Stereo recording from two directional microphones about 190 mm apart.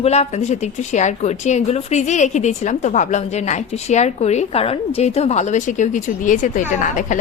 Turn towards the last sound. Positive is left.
turn(degrees=40)  # may be behind; listen again after turning